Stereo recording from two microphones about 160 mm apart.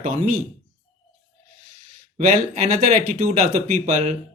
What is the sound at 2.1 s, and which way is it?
Speech, 45° right (ahead or behind).